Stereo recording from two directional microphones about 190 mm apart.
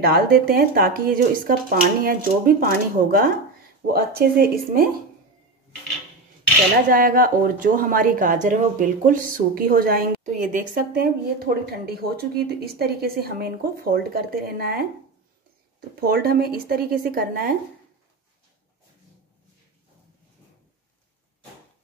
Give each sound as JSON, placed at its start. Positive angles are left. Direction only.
{"t": 0.0, "sound": "speech", "side_deg": -55}
{"t": 6.9, "sound": "speech", "side_deg": -50}
{"t": 11.7, "sound": "speech", "side_deg": -55}
{"t": 16.0, "sound": "speech", "side_deg": -50}